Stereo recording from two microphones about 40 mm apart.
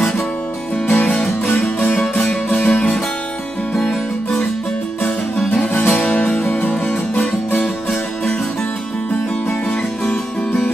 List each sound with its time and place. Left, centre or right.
0.8 s music: left
1.1 s music: centre
2.0 s music: left
2.6 s music: left
5.9 s music: left